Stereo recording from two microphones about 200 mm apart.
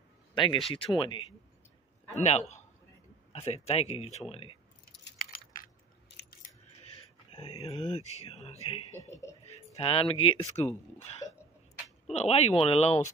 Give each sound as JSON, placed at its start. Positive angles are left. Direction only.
{"t": 0.3, "sound": "a sound", "side_deg": 25}
{"t": 0.7, "sound": "speech", "side_deg": 25}
{"t": 5.0, "sound": "chewing", "side_deg": 45}
{"t": 7.3, "sound": "speech", "side_deg": 30}
{"t": 12.1, "sound": "speech", "side_deg": 30}